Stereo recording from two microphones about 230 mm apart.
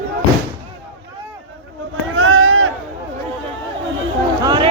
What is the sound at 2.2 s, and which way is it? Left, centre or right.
Run, right.